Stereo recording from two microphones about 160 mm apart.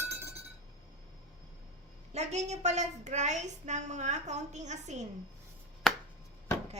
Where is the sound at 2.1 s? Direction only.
45° right (ahead or behind).